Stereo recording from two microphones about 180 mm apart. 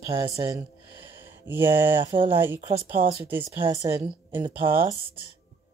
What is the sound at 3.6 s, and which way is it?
Speech, 20° right (ahead or behind).